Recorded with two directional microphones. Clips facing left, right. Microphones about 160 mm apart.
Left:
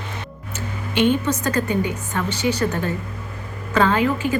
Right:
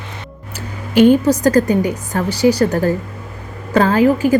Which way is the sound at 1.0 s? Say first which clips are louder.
Right 9 dB; 35° right (ahead or behind).